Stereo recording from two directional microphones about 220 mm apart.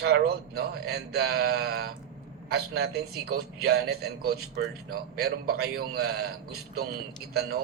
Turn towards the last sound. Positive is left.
turn(degrees=-45)  # may be behind; listen again after turning